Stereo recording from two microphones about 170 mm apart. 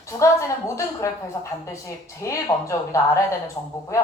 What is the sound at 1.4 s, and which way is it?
A woman's voice, 25° left (ahead or behind).